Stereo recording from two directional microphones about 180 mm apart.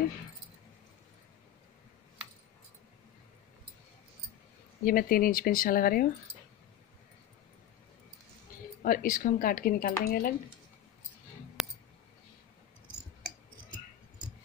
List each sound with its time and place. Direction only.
4.8 s speech: 55° left (ahead or behind)
8.8 s speech: 50° left (ahead or behind)
11.6 s clicking: centre (ahead or behind)